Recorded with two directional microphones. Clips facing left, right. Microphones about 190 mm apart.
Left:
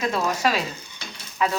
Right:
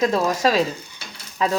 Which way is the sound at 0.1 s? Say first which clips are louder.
Right 4 dB; 35° right (ahead or behind).